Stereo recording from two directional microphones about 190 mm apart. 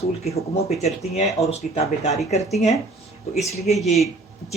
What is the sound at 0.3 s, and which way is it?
Speech, 35° left (ahead or behind).